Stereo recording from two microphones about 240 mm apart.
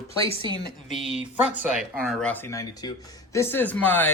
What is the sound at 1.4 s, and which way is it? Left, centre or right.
Speech, centre.